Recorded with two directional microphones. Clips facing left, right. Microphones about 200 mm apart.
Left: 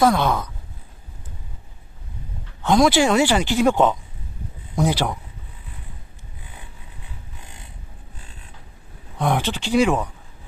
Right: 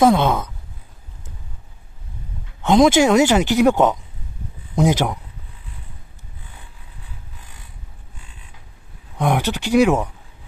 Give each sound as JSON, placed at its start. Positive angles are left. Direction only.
{"t": 0.0, "sound": "speech", "side_deg": -20}
{"t": 2.6, "sound": "speech", "side_deg": -20}
{"t": 9.2, "sound": "speech", "side_deg": -15}